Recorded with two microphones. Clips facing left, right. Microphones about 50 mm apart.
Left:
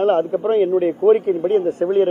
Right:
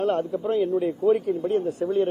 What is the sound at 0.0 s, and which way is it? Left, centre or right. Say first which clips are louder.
A man's voice: left 7 dB; left.